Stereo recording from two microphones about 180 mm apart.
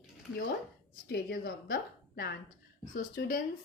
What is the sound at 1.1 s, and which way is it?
A woman's voice, 55° left (ahead or behind).